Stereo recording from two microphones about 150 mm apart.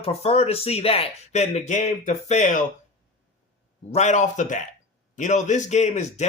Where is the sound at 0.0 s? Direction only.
45° left (ahead or behind).